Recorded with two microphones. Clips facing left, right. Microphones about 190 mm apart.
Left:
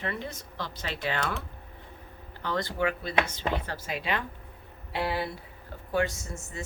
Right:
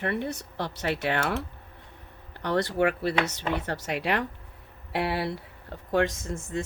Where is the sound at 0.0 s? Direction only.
60° right (ahead or behind).